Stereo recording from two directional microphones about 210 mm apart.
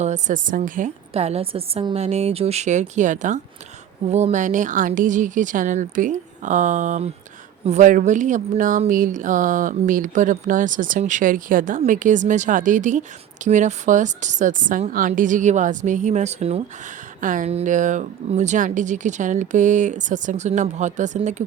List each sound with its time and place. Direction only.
0.0 s speech: 35° right (ahead or behind)